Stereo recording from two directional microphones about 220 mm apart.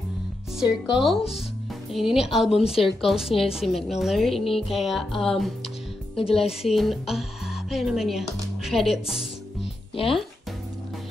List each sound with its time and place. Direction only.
0.6 s a woman's voice: centre (ahead or behind)
6.1 s speech: 25° left (ahead or behind)
6.4 s a woman's voice: centre (ahead or behind)